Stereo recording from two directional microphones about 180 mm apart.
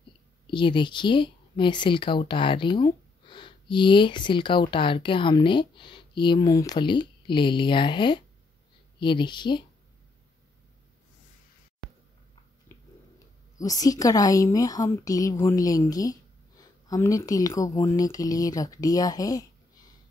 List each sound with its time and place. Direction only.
0.5 s speech: 25° left (ahead or behind)
12.7 s a sound: 15° left (ahead or behind)
13.6 s speech: 20° left (ahead or behind)